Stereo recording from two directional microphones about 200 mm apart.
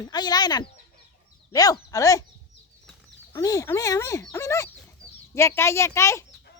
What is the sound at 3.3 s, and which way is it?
Speech, 15° left (ahead or behind).